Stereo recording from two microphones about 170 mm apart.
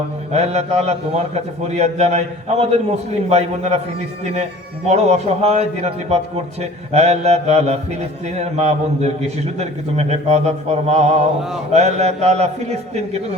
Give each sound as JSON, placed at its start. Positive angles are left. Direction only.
{"t": 0.3, "sound": "a man's voice", "side_deg": -40}
{"t": 4.9, "sound": "a man's voice", "side_deg": -40}